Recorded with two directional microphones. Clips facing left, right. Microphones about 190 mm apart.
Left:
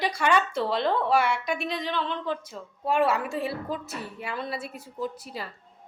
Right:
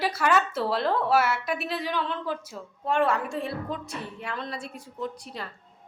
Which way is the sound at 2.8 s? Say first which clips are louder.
Left 1 dB; 5° left (ahead or behind).